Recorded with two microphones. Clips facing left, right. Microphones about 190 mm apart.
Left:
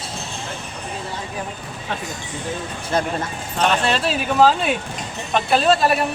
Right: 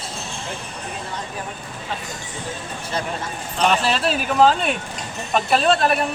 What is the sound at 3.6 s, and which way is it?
Speech, centre (ahead or behind).